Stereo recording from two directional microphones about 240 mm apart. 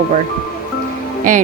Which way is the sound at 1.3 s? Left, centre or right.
Right.